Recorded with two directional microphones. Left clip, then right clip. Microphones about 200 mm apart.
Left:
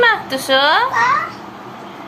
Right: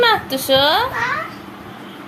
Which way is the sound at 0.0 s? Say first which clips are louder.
Left 1 dB; 10° right (ahead or behind).